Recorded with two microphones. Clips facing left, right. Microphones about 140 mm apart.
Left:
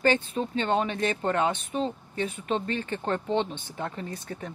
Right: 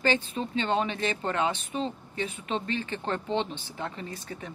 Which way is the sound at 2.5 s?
50° left (ahead or behind).